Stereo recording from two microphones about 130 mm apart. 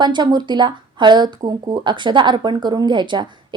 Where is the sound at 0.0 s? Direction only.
35° right (ahead or behind).